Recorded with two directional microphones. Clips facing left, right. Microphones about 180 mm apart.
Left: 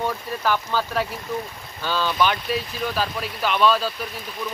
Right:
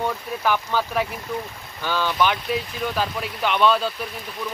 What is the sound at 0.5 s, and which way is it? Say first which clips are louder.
Speech: right 1 dB; 15° right (ahead or behind).